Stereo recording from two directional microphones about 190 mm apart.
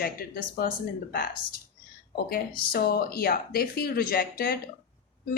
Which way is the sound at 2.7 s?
55° left (ahead or behind).